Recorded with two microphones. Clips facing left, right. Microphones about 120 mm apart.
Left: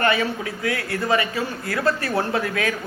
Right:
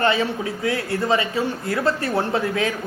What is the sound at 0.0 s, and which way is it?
A woman's voice, 25° right (ahead or behind).